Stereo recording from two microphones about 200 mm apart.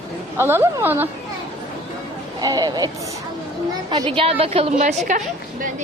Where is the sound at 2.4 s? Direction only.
20° right (ahead or behind).